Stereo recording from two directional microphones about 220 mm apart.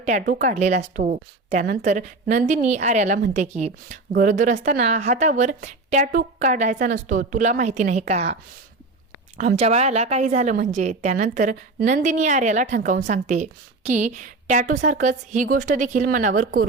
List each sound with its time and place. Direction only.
0.0 s a woman's voice: 35° right (ahead or behind)
9.4 s a woman's voice: 30° right (ahead or behind)